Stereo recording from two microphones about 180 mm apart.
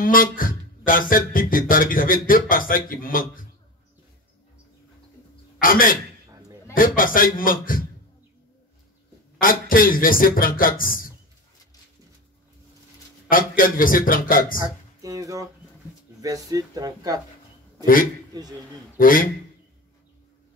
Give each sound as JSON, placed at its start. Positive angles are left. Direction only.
{"t": 0.0, "sound": "speech", "side_deg": 50}
{"t": 5.6, "sound": "speech", "side_deg": 50}
{"t": 7.0, "sound": "speech", "side_deg": 50}
{"t": 9.4, "sound": "speech", "side_deg": 50}
{"t": 13.3, "sound": "speech", "side_deg": 50}
{"t": 14.6, "sound": "a sound", "side_deg": -20}
{"t": 16.2, "sound": "speech", "side_deg": -20}
{"t": 18.3, "sound": "speech", "side_deg": -20}
{"t": 18.9, "sound": "speech", "side_deg": 50}